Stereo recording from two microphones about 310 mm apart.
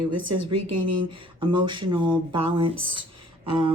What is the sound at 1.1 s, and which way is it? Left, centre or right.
Speech, centre.